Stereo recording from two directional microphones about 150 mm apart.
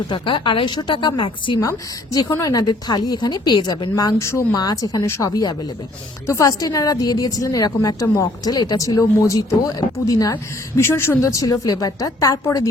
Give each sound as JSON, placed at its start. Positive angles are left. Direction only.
{"t": 0.1, "sound": "a woman's voice", "side_deg": 30}